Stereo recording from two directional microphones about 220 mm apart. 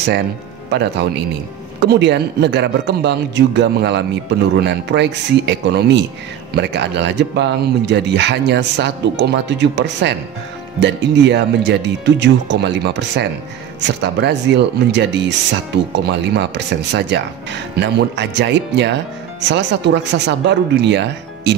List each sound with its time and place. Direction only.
0.7 s speech: 50° right (ahead or behind)
16.3 s speech: 50° right (ahead or behind)